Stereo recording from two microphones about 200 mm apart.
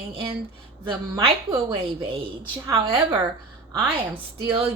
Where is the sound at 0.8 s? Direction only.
25° right (ahead or behind).